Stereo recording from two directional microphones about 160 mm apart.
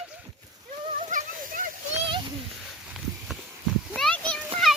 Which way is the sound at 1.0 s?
55° right (ahead or behind).